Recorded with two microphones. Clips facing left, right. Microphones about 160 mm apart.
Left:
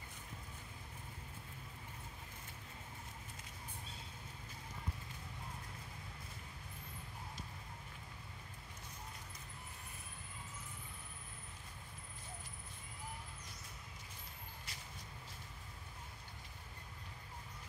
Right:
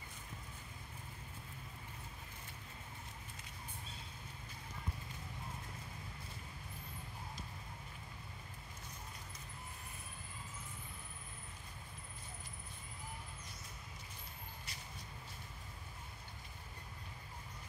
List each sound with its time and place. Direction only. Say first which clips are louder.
14.7 s vehicle: right 1 dB; 90° left